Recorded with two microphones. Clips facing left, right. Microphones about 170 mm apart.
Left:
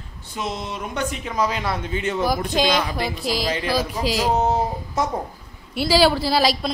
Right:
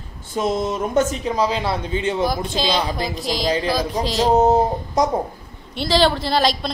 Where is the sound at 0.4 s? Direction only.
45° right (ahead or behind); by 2.2 s 30° right (ahead or behind).